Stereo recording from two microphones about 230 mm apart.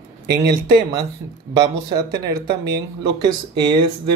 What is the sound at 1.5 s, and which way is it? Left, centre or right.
Speech, centre.